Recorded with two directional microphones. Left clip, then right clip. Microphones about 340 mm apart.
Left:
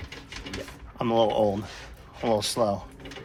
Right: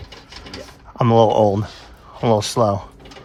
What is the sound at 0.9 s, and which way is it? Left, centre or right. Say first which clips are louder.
Speech: right 9 dB; right.